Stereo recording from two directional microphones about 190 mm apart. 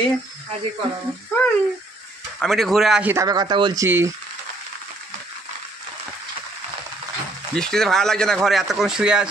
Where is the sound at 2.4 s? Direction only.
Centre (ahead or behind).